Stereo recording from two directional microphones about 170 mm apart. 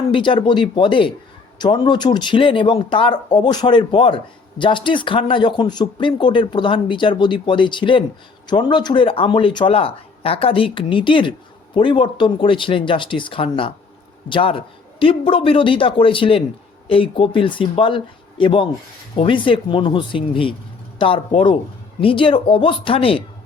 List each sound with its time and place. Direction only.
0.1 s a man's voice: 30° left (ahead or behind)